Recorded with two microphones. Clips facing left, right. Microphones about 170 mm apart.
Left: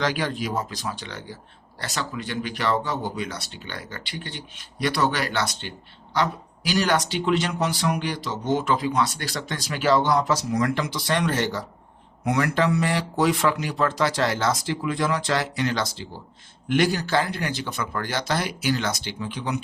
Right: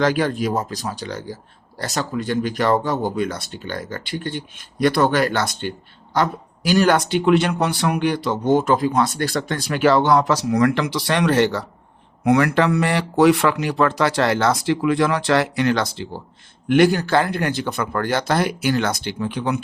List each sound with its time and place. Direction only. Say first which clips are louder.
0.0 s speech: right 7 dB; 50° right (ahead or behind)